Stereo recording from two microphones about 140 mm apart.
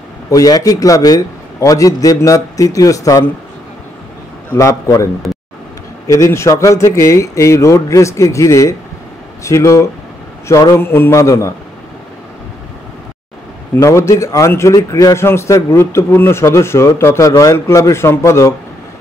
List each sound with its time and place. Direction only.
0.3 s a man's voice: 25° left (ahead or behind)
4.5 s a man's voice: 20° left (ahead or behind)
13.7 s a man's voice: 20° left (ahead or behind)